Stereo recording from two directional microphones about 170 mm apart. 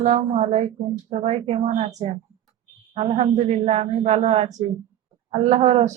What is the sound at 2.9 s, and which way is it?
Speech, 40° right (ahead or behind).